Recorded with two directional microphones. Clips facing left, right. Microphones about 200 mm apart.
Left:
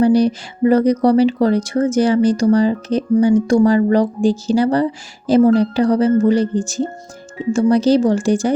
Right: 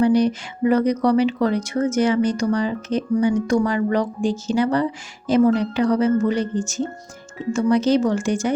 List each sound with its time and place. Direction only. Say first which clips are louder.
0.0 s speech: left 4 dB; 35° left (ahead or behind)